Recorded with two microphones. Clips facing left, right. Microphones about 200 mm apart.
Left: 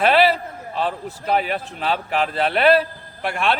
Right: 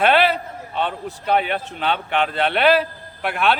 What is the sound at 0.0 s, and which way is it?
A man's voice, centre (ahead or behind).